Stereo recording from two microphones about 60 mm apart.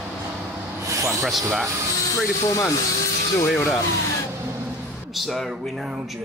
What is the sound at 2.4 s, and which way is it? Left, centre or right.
Speech, left.